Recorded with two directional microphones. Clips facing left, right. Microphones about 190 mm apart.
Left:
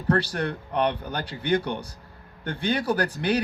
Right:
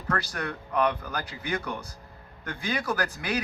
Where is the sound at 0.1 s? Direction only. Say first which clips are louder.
Left 7 dB; 30° left (ahead or behind).